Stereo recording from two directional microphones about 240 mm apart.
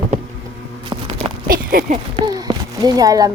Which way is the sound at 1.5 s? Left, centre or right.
Right.